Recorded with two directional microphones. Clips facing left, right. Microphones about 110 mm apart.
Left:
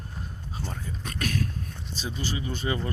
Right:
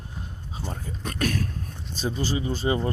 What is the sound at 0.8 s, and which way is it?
Speech, 40° right (ahead or behind).